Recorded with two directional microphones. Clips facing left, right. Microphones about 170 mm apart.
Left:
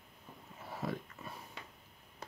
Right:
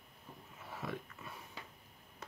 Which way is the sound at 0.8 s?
35° left (ahead or behind).